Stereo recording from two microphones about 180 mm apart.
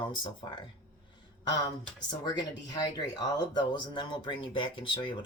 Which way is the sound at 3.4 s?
25° left (ahead or behind).